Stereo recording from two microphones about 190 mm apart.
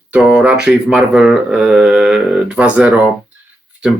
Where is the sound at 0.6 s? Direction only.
5° right (ahead or behind).